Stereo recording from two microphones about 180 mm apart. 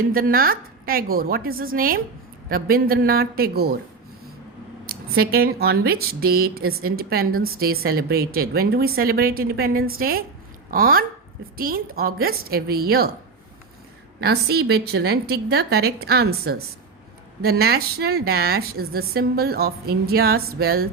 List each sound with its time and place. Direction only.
0.0 s a woman's voice: 55° right (ahead or behind)
4.9 s a woman's voice: 60° right (ahead or behind)
14.2 s speech: 60° right (ahead or behind)